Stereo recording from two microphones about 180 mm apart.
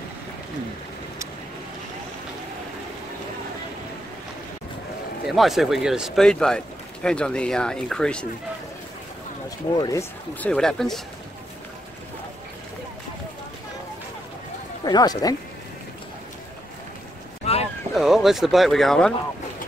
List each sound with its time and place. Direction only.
5.2 s speech: centre (ahead or behind)
9.8 s speech: 20° left (ahead or behind)
10.4 s speech: 5° left (ahead or behind)
14.9 s speech: 20° left (ahead or behind)
17.4 s a sound: 35° left (ahead or behind)
17.9 s speech: centre (ahead or behind)